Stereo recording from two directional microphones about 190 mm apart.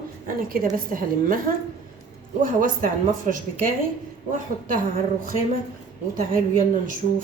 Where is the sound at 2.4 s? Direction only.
45° right (ahead or behind).